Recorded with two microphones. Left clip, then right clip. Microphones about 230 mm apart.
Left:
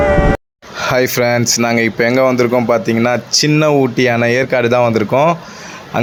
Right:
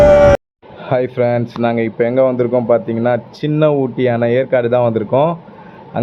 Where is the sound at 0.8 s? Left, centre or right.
Left.